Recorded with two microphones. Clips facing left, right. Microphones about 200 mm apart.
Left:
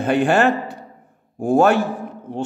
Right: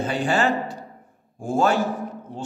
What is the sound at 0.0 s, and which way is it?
A man's voice, 60° left (ahead or behind).